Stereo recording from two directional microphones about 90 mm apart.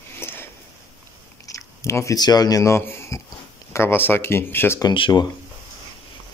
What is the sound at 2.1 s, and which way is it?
Speech, 50° left (ahead or behind).